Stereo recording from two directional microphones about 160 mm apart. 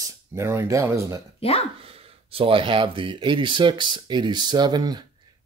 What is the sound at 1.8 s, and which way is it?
Speech, 35° right (ahead or behind).